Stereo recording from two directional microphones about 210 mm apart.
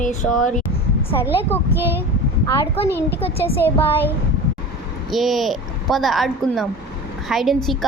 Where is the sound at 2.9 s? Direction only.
10° left (ahead or behind).